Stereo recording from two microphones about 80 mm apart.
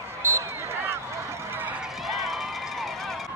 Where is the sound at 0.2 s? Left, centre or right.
Right.